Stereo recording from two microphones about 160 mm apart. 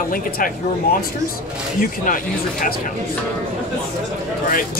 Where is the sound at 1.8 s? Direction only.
60° left (ahead or behind).